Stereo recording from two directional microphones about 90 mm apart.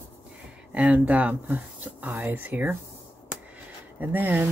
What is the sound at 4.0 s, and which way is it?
Speech, 20° right (ahead or behind).